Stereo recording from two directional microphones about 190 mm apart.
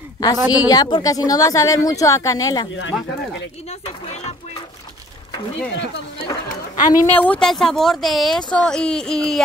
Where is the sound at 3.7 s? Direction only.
35° left (ahead or behind).